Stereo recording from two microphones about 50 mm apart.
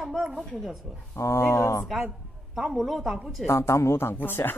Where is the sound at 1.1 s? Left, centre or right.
Left.